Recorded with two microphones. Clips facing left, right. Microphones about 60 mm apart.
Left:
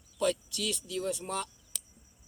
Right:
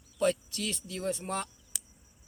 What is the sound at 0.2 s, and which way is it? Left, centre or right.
Speech, right.